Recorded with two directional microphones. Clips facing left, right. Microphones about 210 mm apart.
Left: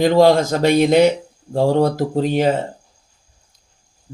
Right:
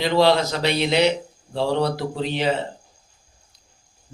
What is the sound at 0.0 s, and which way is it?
Speech, 45° left (ahead or behind).